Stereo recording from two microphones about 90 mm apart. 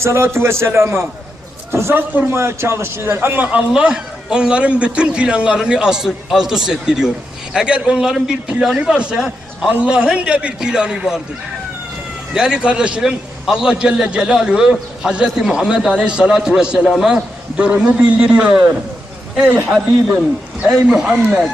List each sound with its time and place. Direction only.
0.0 s a man's voice: 30° right (ahead or behind); by 11.2 s 10° right (ahead or behind)
12.3 s a man's voice: 5° right (ahead or behind)
20.7 s a man's voice: 10° right (ahead or behind)